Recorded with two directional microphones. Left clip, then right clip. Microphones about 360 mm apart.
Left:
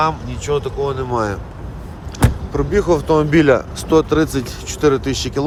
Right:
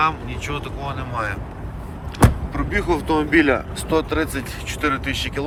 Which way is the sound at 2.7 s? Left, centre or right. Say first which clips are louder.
Left 6 dB; centre.